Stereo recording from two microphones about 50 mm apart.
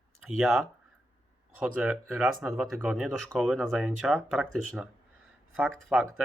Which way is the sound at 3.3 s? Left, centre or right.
Centre.